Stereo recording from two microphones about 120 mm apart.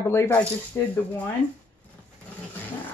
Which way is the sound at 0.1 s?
15° left (ahead or behind).